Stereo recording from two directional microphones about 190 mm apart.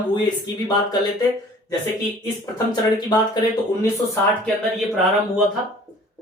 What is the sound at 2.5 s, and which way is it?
Speech, 20° left (ahead or behind).